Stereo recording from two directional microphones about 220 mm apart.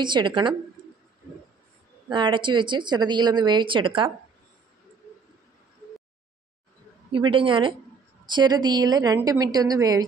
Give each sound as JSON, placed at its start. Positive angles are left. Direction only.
{"t": 0.0, "sound": "speech", "side_deg": -20}
{"t": 2.0, "sound": "speech", "side_deg": -20}
{"t": 7.1, "sound": "a woman's voice", "side_deg": -25}